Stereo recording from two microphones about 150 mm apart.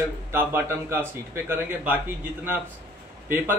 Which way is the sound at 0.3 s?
15° right (ahead or behind).